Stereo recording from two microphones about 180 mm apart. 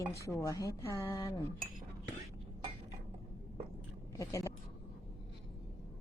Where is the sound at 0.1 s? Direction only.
15° left (ahead or behind).